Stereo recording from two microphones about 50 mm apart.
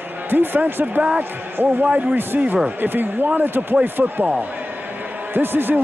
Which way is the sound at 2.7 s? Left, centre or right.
Right.